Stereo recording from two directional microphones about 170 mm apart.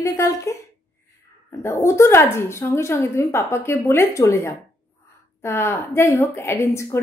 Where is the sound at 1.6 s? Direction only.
15° left (ahead or behind).